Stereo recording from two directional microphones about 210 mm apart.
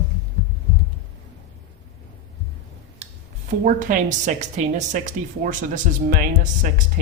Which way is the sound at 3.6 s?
40° right (ahead or behind).